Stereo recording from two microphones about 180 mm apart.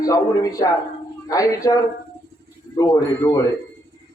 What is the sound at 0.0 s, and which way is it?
Speech, 20° left (ahead or behind).